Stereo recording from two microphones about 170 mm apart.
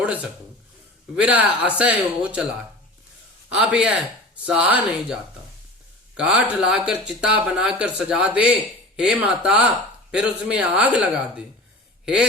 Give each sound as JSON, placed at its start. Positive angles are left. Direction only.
{"t": 0.0, "sound": "speech", "side_deg": -10}
{"t": 3.5, "sound": "speech", "side_deg": -5}
{"t": 6.1, "sound": "speech", "side_deg": -5}